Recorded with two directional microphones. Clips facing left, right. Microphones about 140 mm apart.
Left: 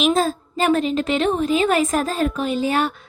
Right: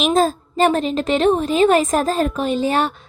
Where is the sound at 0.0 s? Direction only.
45° right (ahead or behind).